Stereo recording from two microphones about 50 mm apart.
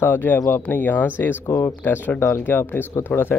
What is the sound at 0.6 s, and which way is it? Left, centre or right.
Speech, left.